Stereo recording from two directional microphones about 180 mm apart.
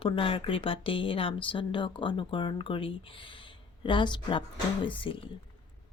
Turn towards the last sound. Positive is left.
turn(degrees=30)  # may be behind; listen again after turning